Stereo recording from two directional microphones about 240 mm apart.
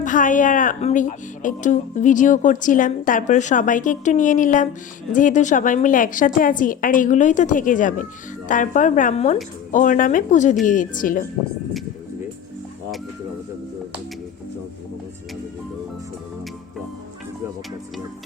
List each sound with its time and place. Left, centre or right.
0.0 s speech: left